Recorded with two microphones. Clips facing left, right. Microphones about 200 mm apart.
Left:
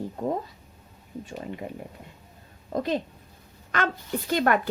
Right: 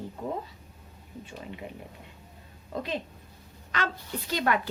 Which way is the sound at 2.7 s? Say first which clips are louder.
Left 6 dB; 40° left (ahead or behind).